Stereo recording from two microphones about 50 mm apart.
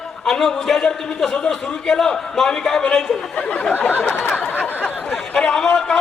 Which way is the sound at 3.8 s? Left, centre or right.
Left.